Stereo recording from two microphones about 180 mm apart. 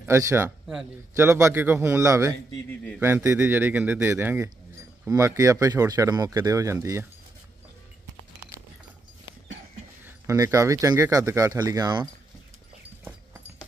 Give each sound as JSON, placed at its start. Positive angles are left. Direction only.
{"t": 0.0, "sound": "speech", "side_deg": -15}
{"t": 10.2, "sound": "speech", "side_deg": -15}
{"t": 13.0, "sound": "a sound", "side_deg": -10}